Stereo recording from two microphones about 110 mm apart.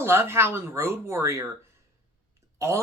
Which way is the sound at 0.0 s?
20° right (ahead or behind).